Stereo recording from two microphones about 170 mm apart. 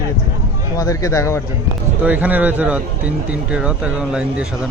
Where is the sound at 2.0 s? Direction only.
10° right (ahead or behind).